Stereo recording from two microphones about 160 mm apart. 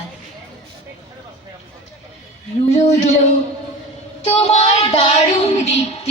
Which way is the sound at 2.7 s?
45° left (ahead or behind).